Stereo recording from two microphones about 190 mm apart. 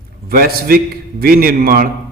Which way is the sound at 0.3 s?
55° right (ahead or behind).